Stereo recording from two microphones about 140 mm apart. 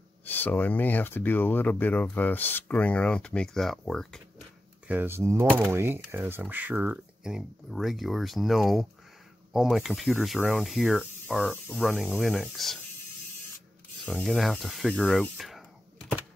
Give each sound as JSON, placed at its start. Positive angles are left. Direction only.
{"t": 0.2, "sound": "speech", "side_deg": 15}
{"t": 4.8, "sound": "speech", "side_deg": -15}
{"t": 14.0, "sound": "speech", "side_deg": 5}